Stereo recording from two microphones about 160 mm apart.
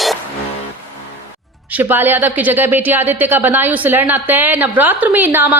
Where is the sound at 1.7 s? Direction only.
10° right (ahead or behind).